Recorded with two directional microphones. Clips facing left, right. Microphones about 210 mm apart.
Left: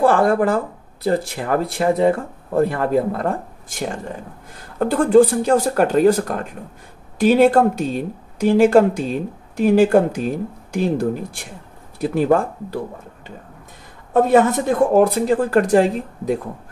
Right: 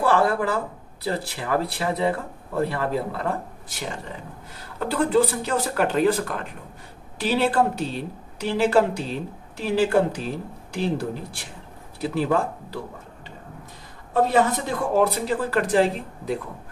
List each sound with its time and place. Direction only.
0.0 s speech: 50° left (ahead or behind)
14.1 s speech: 50° left (ahead or behind)